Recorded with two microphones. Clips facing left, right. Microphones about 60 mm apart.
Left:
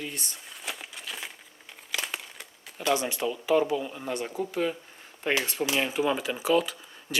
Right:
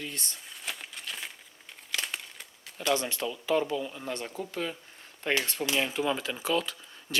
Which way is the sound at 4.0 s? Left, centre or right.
Centre.